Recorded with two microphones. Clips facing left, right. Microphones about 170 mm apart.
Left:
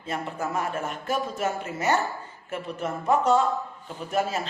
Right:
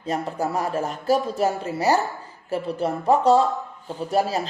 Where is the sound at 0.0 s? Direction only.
40° right (ahead or behind).